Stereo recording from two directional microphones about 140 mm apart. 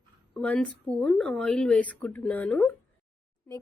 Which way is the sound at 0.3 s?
10° left (ahead or behind).